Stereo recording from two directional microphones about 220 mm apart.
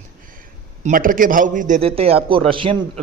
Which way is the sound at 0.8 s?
40° right (ahead or behind).